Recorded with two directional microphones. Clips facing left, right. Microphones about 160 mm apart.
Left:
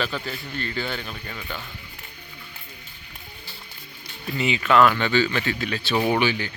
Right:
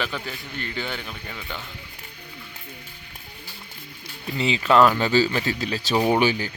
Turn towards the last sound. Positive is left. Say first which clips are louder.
# right 2 dB
turn(degrees=-40)  # may be behind; listen again after turning